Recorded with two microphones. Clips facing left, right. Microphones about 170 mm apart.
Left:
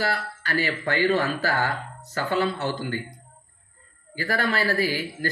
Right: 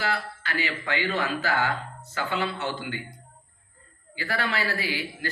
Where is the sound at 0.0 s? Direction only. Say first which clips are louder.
Left 2 dB; 40° left (ahead or behind).